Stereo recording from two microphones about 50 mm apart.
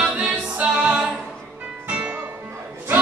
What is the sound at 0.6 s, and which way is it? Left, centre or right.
Music, right.